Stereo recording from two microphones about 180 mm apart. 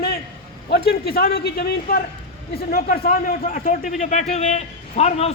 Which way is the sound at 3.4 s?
45° left (ahead or behind).